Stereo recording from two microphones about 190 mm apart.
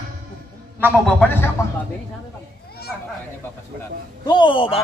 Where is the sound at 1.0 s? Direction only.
10° left (ahead or behind).